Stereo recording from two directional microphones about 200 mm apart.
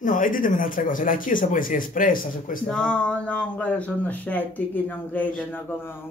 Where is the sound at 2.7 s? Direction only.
5° left (ahead or behind).